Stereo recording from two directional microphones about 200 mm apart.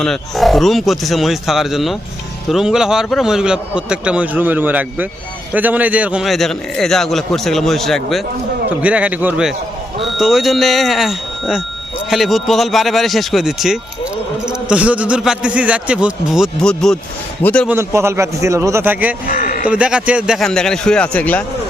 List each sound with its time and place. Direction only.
0.0 s a man's voice: centre (ahead or behind)
17.7 s a man's voice: 15° right (ahead or behind)
19.2 s a sound: 45° left (ahead or behind)
19.6 s a man's voice: 5° right (ahead or behind)